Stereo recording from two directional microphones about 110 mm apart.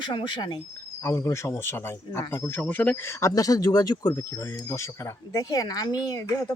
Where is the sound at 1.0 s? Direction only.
25° left (ahead or behind).